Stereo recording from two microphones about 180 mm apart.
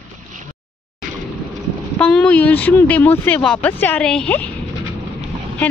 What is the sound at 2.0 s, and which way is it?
Speech, 5° left (ahead or behind).